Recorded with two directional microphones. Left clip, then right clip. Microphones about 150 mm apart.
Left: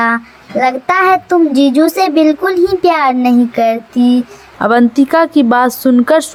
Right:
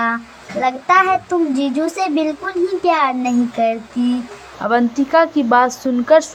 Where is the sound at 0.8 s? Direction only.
35° left (ahead or behind).